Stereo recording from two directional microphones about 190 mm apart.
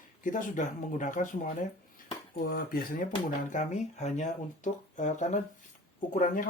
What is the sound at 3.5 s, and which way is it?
A man's voice, 40° left (ahead or behind).